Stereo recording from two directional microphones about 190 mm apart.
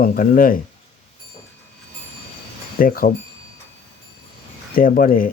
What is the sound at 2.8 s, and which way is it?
Speech, 50° left (ahead or behind).